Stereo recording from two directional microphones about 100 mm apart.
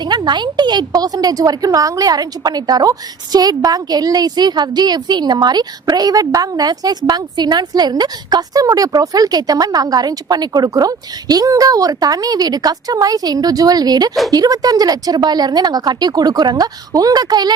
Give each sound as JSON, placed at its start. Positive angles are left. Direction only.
{"t": 0.0, "sound": "a woman's voice", "side_deg": -45}